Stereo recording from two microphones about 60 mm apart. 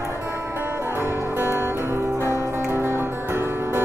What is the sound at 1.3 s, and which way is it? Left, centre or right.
Music, right.